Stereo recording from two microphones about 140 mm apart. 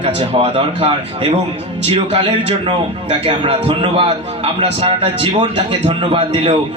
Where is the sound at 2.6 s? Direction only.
40° right (ahead or behind).